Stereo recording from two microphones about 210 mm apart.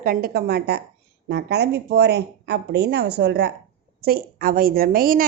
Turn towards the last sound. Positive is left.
turn(degrees=-45)  # may be behind; listen again after turning